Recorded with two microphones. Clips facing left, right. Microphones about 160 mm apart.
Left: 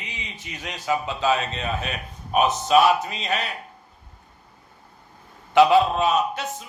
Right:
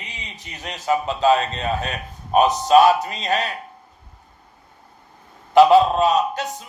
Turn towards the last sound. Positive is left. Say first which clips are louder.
# right 2 dB
turn(degrees=-40)  # may be behind; listen again after turning